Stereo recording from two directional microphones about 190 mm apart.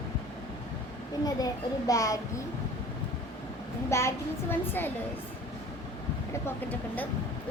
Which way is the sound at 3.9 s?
15° left (ahead or behind).